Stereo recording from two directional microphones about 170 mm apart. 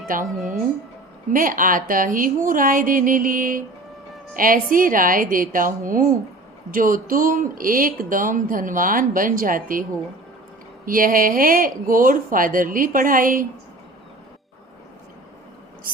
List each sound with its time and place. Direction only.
0.3 s speech: centre (ahead or behind)
1.3 s a woman's voice: 55° right (ahead or behind)
10.8 s speech: 55° right (ahead or behind)